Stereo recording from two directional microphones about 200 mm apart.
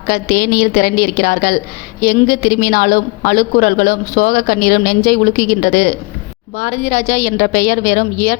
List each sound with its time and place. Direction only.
0.1 s a woman's voice: 45° left (ahead or behind)